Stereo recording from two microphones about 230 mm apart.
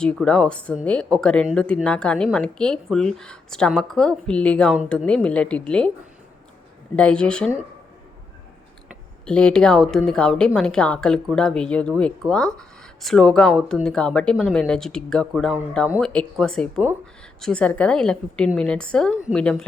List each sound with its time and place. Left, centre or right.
0.0 s speech: centre
6.9 s speech: centre
8.9 s speech: centre